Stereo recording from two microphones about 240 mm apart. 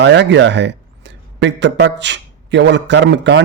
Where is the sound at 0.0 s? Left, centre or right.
Right.